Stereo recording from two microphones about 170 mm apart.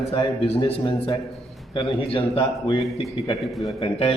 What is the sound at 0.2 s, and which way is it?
A man's voice, 30° left (ahead or behind).